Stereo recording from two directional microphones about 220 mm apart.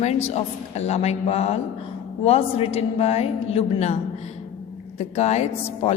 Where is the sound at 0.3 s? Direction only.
30° left (ahead or behind).